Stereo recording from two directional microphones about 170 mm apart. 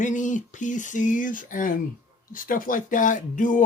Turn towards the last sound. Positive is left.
turn(degrees=50)  # may be behind; listen again after turning